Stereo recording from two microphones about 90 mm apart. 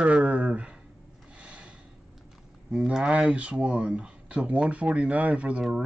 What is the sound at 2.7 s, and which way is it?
Speech, 10° right (ahead or behind).